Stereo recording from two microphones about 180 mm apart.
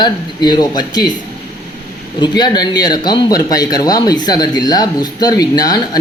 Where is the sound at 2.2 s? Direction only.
25° left (ahead or behind).